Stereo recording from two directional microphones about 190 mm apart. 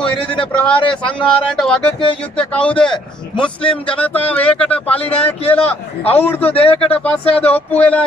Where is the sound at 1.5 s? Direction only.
5° left (ahead or behind).